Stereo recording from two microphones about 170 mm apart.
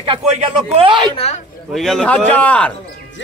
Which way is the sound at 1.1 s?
40° left (ahead or behind).